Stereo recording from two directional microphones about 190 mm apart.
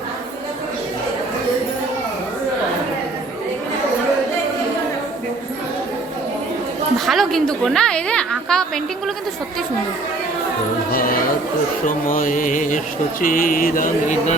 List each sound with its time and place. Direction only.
7.0 s a woman's voice: centre (ahead or behind)
10.9 s chatter: 50° left (ahead or behind)
11.9 s mantra: 45° left (ahead or behind)